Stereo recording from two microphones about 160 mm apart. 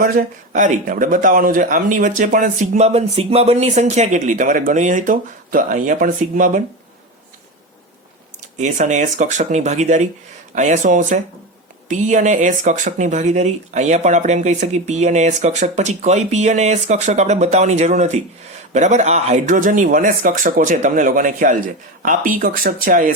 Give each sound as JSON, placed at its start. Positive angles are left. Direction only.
{"t": 0.0, "sound": "speech", "side_deg": -55}
{"t": 8.5, "sound": "speech", "side_deg": -50}